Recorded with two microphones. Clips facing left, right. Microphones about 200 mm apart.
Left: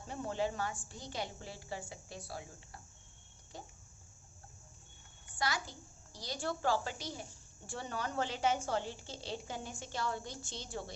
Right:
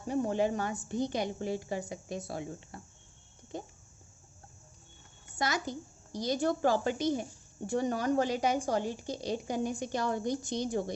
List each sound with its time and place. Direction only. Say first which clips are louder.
0.3 s a woman's voice: right 6 dB; 15° right (ahead or behind)
3.5 s a sound: right 10 dB; 20° right (ahead or behind)
5.4 s a woman's voice: right 5 dB; 20° right (ahead or behind)